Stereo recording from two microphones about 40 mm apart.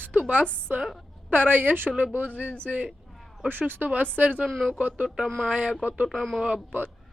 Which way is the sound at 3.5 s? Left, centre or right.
Right.